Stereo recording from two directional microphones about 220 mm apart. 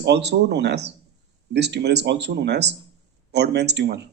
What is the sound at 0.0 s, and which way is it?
Speech, 50° right (ahead or behind).